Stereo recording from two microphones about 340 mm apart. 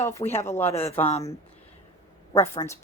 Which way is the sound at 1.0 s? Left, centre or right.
Centre.